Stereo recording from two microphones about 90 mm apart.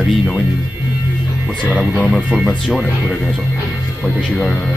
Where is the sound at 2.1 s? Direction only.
15° right (ahead or behind).